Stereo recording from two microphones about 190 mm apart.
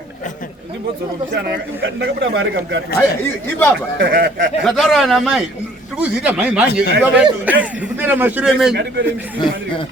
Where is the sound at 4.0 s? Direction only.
60° right (ahead or behind).